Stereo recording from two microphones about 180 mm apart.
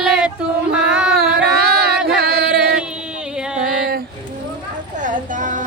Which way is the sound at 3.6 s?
5° right (ahead or behind).